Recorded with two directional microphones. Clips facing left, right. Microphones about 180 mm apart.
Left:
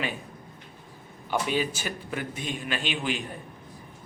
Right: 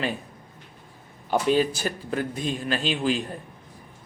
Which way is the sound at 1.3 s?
40° right (ahead or behind).